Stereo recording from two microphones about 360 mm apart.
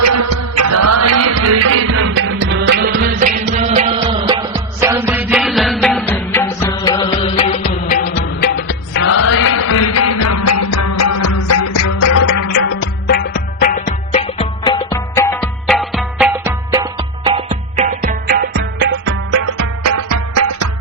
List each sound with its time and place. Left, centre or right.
0.0 s music: right; by 8.4 s left
8.9 s music: left
13.1 s music: left; by 18.3 s right
18.8 s music: right
19.8 s music: right